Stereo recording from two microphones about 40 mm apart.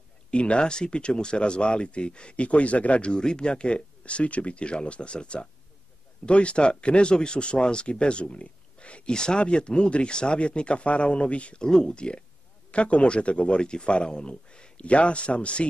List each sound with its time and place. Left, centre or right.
0.3 s speech: left
11.6 s speech: centre